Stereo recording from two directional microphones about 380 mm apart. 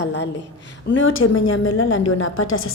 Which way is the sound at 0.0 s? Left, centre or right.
Left.